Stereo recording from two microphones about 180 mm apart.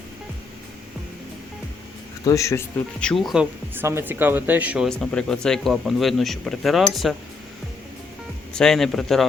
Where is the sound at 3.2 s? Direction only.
5° right (ahead or behind).